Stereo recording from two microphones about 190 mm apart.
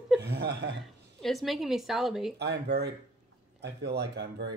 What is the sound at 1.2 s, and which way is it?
A woman's voice, centre (ahead or behind).